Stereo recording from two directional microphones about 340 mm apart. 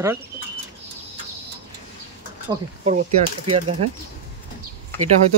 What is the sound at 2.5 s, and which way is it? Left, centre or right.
Speech, centre.